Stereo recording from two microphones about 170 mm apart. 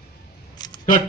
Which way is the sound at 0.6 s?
25° left (ahead or behind).